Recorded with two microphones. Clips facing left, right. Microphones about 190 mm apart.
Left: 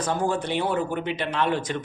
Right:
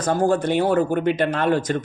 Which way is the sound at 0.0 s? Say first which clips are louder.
Right 6 dB; 45° right (ahead or behind).